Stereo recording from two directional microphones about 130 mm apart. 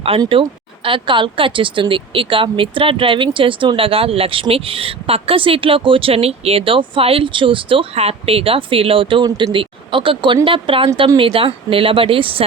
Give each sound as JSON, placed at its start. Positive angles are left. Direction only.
{"t": 0.9, "sound": "speech", "side_deg": -40}